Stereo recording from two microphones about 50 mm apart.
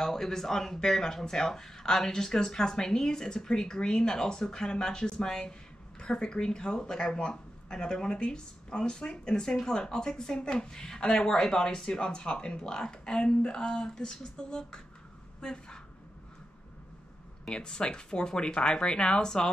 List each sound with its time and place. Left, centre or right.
0.0 s speech: centre
17.5 s speech: centre